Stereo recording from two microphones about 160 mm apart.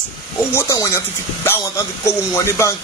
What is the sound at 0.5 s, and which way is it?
Music, 20° left (ahead or behind).